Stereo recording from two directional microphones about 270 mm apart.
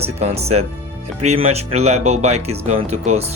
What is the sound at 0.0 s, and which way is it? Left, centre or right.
Speech, right.